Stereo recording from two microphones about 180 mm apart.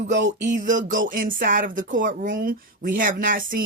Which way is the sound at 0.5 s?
45° right (ahead or behind).